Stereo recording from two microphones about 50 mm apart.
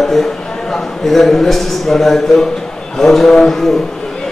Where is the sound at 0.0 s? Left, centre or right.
Centre.